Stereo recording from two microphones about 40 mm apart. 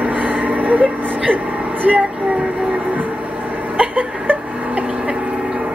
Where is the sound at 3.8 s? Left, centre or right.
Right.